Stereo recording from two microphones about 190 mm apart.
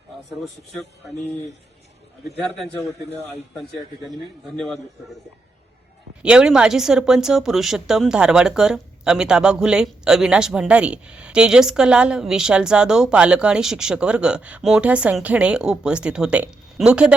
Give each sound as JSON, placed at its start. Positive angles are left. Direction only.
{"t": 0.4, "sound": "speech", "side_deg": 0}
{"t": 4.5, "sound": "speech", "side_deg": 0}
{"t": 6.2, "sound": "speech", "side_deg": -5}